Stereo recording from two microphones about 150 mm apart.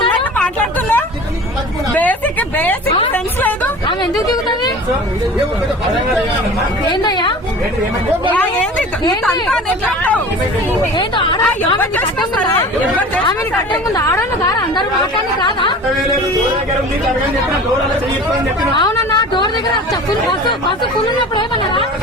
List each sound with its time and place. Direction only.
0.3 s a sound: 10° left (ahead or behind)
6.9 s a woman's voice: 30° left (ahead or behind)
8.3 s speech: 10° left (ahead or behind)
10.9 s a woman's voice: 35° left (ahead or behind)
13.9 s a woman's voice: 20° left (ahead or behind)
15.4 s a woman's voice: 30° left (ahead or behind)
18.7 s a sound: 30° left (ahead or behind)